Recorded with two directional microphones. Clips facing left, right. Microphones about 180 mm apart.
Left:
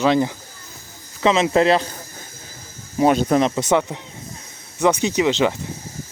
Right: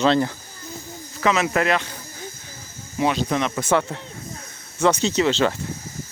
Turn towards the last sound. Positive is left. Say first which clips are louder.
# left 1 dB
turn(degrees=15)  # may be behind; listen again after turning